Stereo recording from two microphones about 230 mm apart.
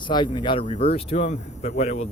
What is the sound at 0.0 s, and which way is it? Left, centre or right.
Speech, centre.